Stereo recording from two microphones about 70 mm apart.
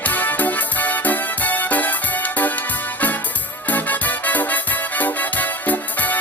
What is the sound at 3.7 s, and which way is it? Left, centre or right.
Music, left.